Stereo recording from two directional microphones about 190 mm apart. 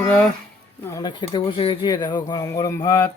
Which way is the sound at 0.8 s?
20° left (ahead or behind).